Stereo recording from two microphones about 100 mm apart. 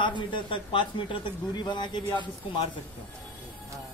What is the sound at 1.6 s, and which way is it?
Speech, 45° left (ahead or behind).